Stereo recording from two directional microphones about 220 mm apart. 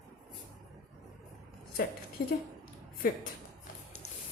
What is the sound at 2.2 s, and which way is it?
Speech, 45° left (ahead or behind).